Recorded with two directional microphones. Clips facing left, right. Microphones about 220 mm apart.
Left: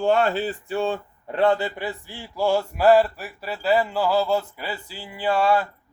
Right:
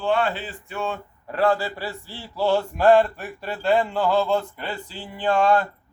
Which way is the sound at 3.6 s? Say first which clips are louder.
Even; 5° left (ahead or behind).